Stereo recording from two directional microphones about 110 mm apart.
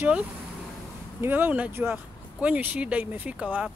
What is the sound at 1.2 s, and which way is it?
Speech, 15° right (ahead or behind).